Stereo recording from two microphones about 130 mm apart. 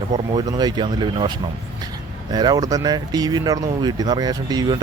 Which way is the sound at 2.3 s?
30° right (ahead or behind).